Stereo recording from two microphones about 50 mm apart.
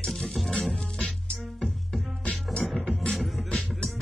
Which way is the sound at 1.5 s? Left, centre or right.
Centre.